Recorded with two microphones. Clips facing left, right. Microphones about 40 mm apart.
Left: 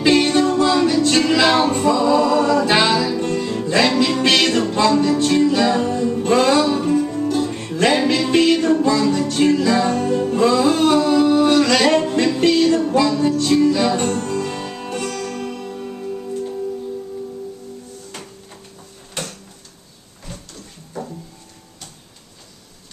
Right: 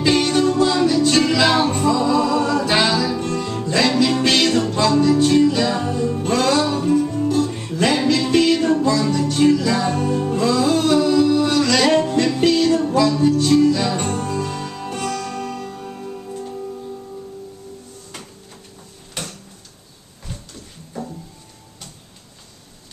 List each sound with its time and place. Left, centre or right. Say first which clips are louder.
0.0 s music: left 2 dB; centre
6.2 s music: left 3 dB; centre
7.6 s music: left 4 dB; centre
8.5 s music: left 1 dB; centre
8.9 s music: left 1 dB; centre
9.9 s music: left 2 dB; centre
10.3 s music: left 2 dB; centre
14.0 s music: left 2 dB; centre
14.6 s music: even; centre
15.4 s music: even; centre
15.8 s music: left 4 dB; centre
20.3 s a sound: right 1 dB; centre